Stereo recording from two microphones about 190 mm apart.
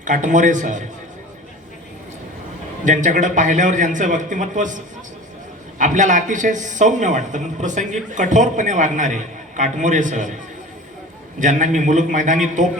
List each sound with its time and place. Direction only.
0.0 s speech: 40° right (ahead or behind)
2.8 s speech: 40° right (ahead or behind)
5.8 s speech: 40° right (ahead or behind)
11.3 s speech: 40° right (ahead or behind)